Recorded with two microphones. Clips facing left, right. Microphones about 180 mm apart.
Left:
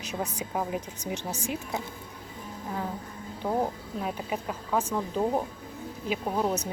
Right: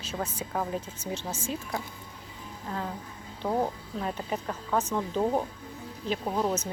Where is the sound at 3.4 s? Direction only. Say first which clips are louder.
Even; 10° left (ahead or behind).